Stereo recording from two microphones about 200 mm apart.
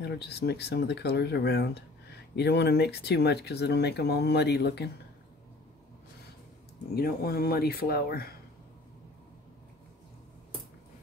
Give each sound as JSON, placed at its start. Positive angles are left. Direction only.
{"t": 0.0, "sound": "speech", "side_deg": 55}
{"t": 7.0, "sound": "speech", "side_deg": 50}